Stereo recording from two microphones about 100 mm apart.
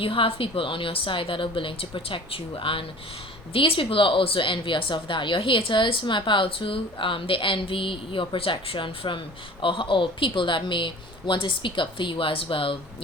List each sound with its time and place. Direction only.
0.0 s a woman's voice: 65° left (ahead or behind)